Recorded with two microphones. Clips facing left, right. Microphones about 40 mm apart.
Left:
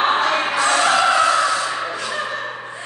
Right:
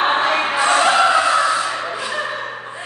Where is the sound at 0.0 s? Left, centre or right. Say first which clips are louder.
Right 1 dB; centre.